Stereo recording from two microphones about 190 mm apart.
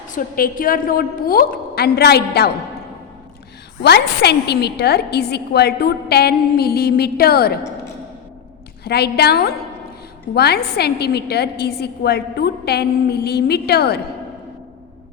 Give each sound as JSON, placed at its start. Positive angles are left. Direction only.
{"t": 0.1, "sound": "a woman's voice", "side_deg": 45}
{"t": 3.8, "sound": "a woman's voice", "side_deg": 60}
{"t": 8.8, "sound": "a woman's voice", "side_deg": 55}